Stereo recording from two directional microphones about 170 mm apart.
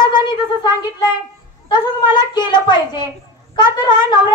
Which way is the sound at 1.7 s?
25° left (ahead or behind).